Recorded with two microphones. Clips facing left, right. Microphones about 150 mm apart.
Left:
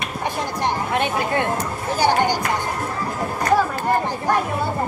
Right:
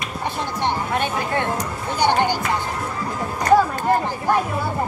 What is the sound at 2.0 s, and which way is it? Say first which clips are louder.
Speech: even; 10° left (ahead or behind).